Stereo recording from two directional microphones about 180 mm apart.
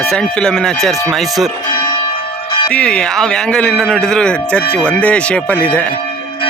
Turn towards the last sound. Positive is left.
turn(degrees=10)  # may be behind; listen again after turning